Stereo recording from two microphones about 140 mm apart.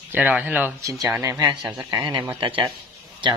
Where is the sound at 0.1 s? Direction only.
10° right (ahead or behind).